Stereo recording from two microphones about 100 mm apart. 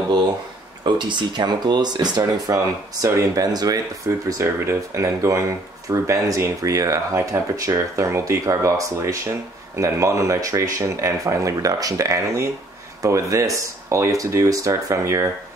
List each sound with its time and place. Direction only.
0.8 s speech: 50° right (ahead or behind); by 15.2 s 30° right (ahead or behind)